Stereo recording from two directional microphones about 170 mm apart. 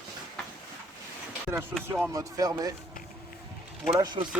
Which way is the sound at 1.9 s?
15° right (ahead or behind).